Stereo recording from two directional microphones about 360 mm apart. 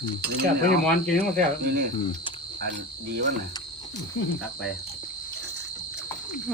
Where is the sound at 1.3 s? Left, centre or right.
Right.